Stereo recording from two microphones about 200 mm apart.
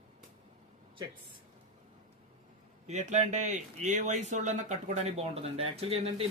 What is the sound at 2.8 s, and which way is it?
Speech, 35° right (ahead or behind).